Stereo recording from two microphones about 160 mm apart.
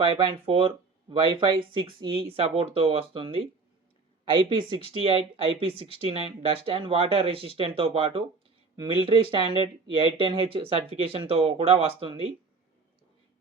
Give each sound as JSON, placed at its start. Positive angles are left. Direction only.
{"t": 0.0, "sound": "speech", "side_deg": -30}